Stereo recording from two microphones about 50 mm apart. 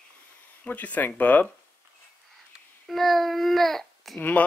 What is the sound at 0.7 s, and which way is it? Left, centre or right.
Speech, left.